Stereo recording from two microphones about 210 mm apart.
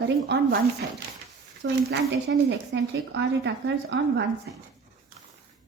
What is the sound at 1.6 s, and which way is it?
Speech, 55° right (ahead or behind).